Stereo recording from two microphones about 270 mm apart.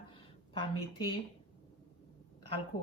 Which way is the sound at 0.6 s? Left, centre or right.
Centre.